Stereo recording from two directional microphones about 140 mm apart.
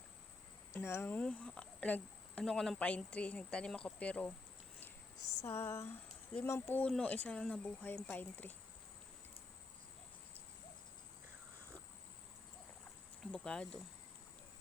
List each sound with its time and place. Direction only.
0.7 s speech: 15° left (ahead or behind)
5.5 s speech: 15° left (ahead or behind)
13.3 s speech: 5° left (ahead or behind)